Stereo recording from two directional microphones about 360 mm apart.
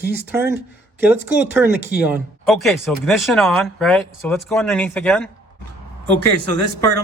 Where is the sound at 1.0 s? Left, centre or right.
Centre.